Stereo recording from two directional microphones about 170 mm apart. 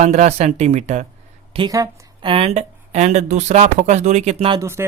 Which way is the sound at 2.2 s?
35° right (ahead or behind).